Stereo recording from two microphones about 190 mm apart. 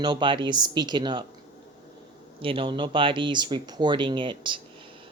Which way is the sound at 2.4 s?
25° right (ahead or behind).